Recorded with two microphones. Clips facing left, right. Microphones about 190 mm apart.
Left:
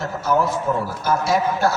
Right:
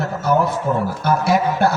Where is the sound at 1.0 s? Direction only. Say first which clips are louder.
Right 2 dB; 60° right (ahead or behind).